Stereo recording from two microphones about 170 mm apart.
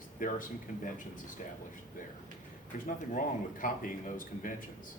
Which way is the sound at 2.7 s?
50° left (ahead or behind).